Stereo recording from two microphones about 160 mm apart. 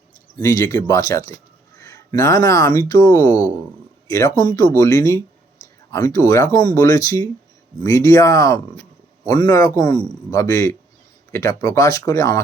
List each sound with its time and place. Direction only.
0.4 s a man's voice: 15° left (ahead or behind)